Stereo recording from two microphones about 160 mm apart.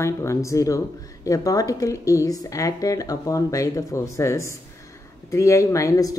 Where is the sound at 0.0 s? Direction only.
15° left (ahead or behind).